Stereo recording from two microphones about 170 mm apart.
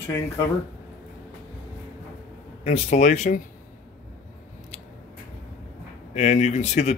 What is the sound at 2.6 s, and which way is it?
Speech, 40° left (ahead or behind).